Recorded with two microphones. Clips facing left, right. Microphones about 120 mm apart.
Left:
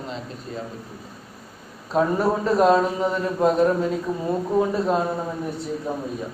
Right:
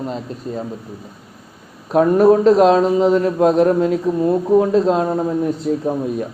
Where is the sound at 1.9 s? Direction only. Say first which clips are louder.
Right 7 dB; 65° right (ahead or behind).